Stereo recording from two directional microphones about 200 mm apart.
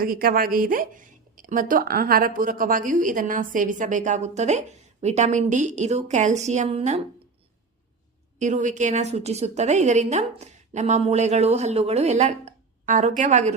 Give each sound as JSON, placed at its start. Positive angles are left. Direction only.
{"t": 0.0, "sound": "speech", "side_deg": -45}
{"t": 8.4, "sound": "speech", "side_deg": -35}